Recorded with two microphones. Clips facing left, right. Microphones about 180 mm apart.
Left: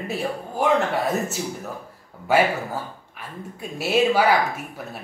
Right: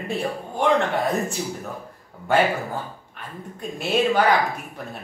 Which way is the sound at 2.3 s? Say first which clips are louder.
Left 1 dB; 5° left (ahead or behind).